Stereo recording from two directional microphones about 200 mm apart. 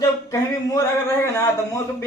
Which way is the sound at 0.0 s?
15° left (ahead or behind).